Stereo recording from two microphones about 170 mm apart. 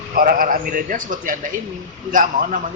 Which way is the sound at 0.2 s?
55° right (ahead or behind).